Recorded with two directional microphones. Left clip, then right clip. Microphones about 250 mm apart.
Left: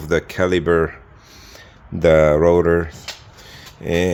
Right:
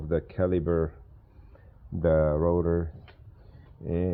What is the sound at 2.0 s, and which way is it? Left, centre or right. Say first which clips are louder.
Speech: left 11 dB; left.